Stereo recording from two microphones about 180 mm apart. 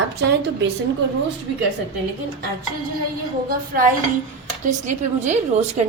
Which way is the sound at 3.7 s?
55° right (ahead or behind).